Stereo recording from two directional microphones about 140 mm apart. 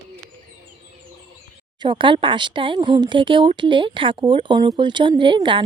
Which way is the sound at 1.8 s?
35° right (ahead or behind).